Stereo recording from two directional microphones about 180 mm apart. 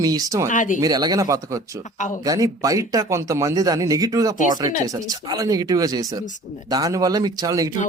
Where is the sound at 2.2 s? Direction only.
20° right (ahead or behind).